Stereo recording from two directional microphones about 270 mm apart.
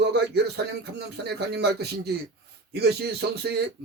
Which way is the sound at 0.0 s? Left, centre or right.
Right.